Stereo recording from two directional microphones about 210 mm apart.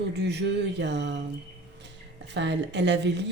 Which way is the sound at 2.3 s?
55° right (ahead or behind).